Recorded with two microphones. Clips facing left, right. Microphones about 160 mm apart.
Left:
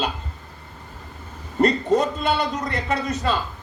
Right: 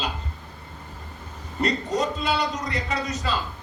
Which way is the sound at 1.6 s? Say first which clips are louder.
Left 6 dB; 55° left (ahead or behind).